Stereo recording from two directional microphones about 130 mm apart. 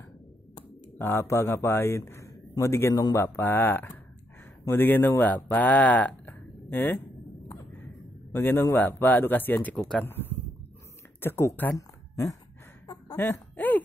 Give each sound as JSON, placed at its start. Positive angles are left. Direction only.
{"t": 0.9, "sound": "a man's voice", "side_deg": 20}
{"t": 8.3, "sound": "speech", "side_deg": 15}
{"t": 11.1, "sound": "speech", "side_deg": 20}
{"t": 11.7, "sound": "a sound", "side_deg": 25}